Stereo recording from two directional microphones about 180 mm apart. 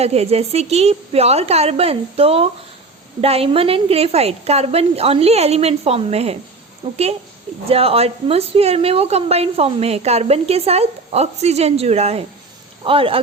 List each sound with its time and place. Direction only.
0.0 s a woman's voice: 35° right (ahead or behind)